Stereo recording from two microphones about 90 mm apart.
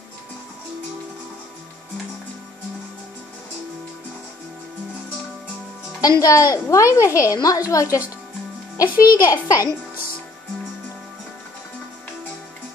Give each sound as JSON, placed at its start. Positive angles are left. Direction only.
{"t": 5.9, "sound": "a woman's voice", "side_deg": 40}
{"t": 9.0, "sound": "a woman's voice", "side_deg": 35}